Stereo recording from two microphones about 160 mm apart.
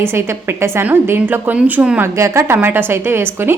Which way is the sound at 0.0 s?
15° right (ahead or behind).